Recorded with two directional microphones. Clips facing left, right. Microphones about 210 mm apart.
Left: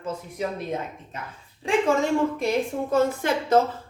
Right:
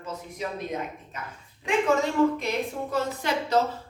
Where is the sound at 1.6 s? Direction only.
30° left (ahead or behind).